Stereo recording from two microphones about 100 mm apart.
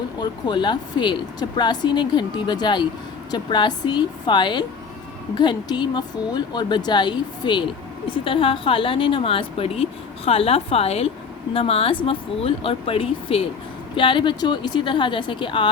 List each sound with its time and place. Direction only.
0.2 s speech: 50° left (ahead or behind)
8.1 s a woman's voice: 65° left (ahead or behind); by 11.1 s 85° left
11.5 s speech: 70° left (ahead or behind); by 15.7 s 55° left (ahead or behind)